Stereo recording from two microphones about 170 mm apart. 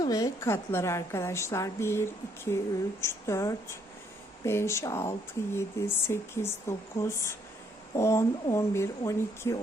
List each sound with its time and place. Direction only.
0.0 s a woman's voice: 20° left (ahead or behind)